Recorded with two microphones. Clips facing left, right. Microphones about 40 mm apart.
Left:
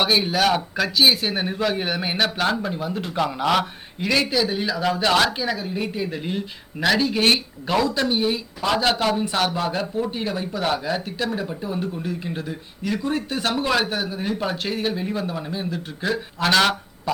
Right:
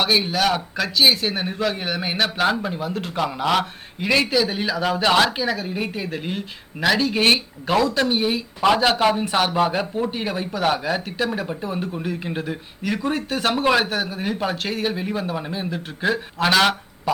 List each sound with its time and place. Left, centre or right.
0.0 s a man's voice: centre
7.1 s speech: centre
14.5 s speech: centre